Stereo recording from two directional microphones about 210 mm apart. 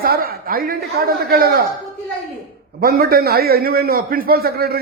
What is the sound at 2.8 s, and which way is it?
A man's voice, 45° right (ahead or behind).